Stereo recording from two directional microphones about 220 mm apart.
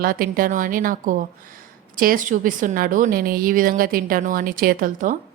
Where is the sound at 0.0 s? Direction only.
40° right (ahead or behind).